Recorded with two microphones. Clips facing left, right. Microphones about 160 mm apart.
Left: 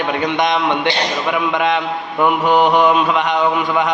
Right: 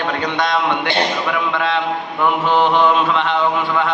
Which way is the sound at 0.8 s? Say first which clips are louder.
Even; 50° right (ahead or behind).